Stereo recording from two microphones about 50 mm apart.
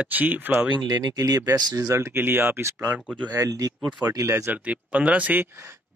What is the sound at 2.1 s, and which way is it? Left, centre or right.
Speech, right.